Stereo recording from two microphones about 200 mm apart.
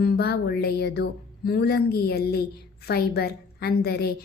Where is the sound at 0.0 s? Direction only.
50° left (ahead or behind).